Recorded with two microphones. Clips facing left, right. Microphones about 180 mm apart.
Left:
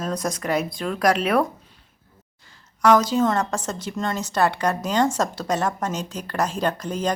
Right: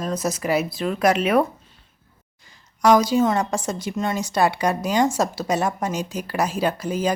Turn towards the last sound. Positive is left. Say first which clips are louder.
# right 2 dB
turn(degrees=-5)  # may be behind; listen again after turning